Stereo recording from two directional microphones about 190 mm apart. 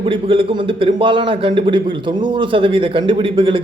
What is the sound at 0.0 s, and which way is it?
A man's voice, 25° right (ahead or behind).